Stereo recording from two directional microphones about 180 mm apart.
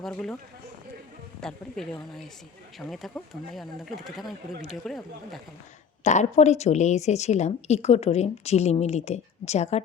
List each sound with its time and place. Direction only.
0.0 s speech: 5° left (ahead or behind)
1.4 s speech: 5° left (ahead or behind)
6.0 s a woman's voice: 40° left (ahead or behind)